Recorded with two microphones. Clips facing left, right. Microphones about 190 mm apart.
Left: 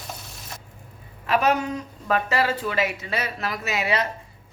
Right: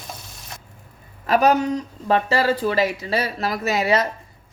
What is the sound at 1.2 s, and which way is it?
Speech, 40° right (ahead or behind).